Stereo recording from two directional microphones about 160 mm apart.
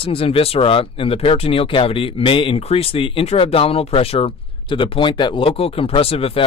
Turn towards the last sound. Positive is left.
turn(degrees=35)  # may be behind; listen again after turning